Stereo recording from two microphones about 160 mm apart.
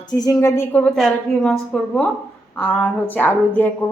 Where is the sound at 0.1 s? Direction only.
25° left (ahead or behind).